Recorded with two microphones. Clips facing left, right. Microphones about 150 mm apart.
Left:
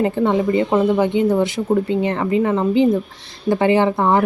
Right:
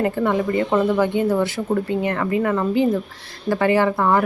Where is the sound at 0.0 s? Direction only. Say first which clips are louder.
Left 3 dB; 20° left (ahead or behind).